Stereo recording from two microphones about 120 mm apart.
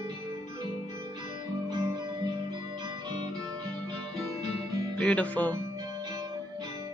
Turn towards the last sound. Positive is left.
turn(degrees=10)  # may be behind; listen again after turning